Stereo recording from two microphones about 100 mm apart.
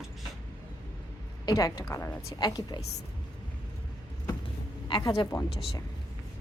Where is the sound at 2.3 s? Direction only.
45° left (ahead or behind).